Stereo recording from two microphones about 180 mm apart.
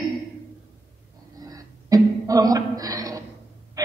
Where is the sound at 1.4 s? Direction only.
20° right (ahead or behind).